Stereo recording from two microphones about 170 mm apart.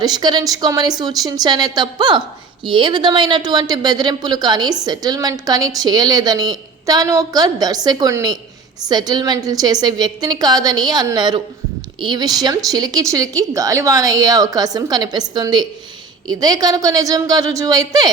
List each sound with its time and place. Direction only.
0.0 s speech: 25° right (ahead or behind)